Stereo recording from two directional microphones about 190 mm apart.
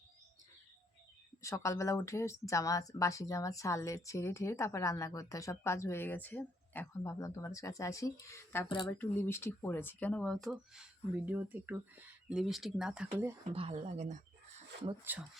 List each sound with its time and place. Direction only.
1.4 s speech: 15° left (ahead or behind)
11.3 s speech: 10° right (ahead or behind)
13.5 s speech: 30° right (ahead or behind)
15.1 s speech: 10° right (ahead or behind)